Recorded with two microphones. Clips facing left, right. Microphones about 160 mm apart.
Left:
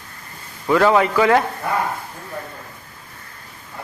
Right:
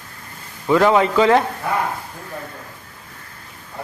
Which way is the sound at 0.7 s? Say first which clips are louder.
Right 1 dB; 20° right (ahead or behind).